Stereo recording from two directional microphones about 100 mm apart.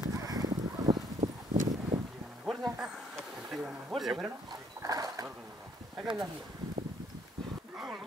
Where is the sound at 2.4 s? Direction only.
Centre (ahead or behind).